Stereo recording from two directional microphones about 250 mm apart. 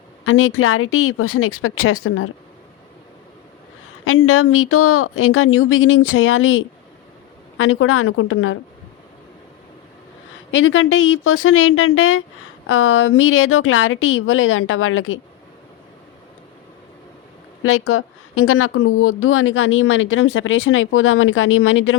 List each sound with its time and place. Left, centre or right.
0.3 s speech: left
4.0 s speech: left
10.5 s a woman's voice: left
17.6 s a woman's voice: left